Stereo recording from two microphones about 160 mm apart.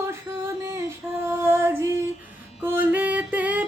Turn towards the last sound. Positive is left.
turn(degrees=-10)  # may be behind; listen again after turning